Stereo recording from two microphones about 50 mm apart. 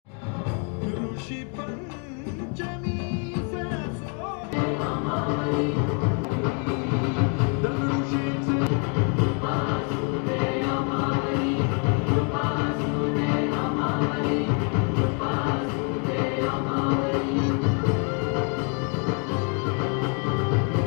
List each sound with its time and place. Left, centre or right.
5.4 s music: centre
8.0 s music: right
8.6 s music: centre
11.1 s music: centre
12.8 s music: centre
15.6 s music: centre